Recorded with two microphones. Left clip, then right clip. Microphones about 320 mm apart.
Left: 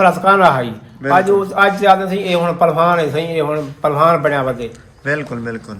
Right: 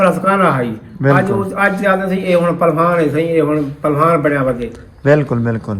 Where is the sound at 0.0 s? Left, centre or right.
Centre.